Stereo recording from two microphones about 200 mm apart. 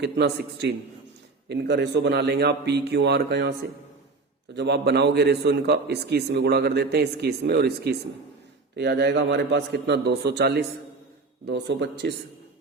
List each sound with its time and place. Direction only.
0.0 s a man's voice: 55° right (ahead or behind)
4.5 s a man's voice: 55° right (ahead or behind)